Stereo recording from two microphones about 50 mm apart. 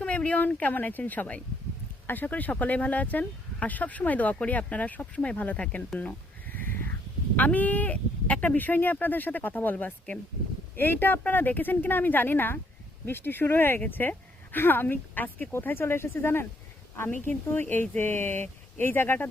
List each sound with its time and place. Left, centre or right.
0.0 s speech: left
6.0 s bleat: left
7.3 s speech: left
15.6 s speech: left